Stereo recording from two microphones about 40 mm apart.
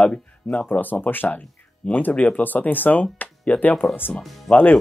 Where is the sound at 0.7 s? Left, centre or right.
Left.